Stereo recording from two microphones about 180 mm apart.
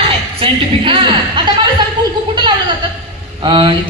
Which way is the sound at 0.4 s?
30° right (ahead or behind).